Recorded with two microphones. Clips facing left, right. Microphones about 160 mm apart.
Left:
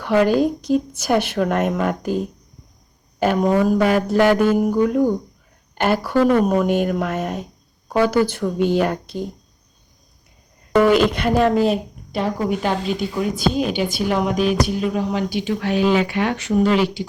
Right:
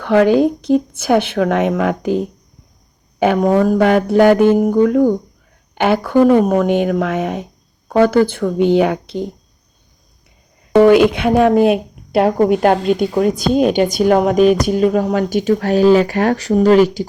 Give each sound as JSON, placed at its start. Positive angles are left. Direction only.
{"t": 0.0, "sound": "a woman's voice", "side_deg": -60}
{"t": 11.1, "sound": "speech", "side_deg": -55}
{"t": 13.1, "sound": "speech", "side_deg": -45}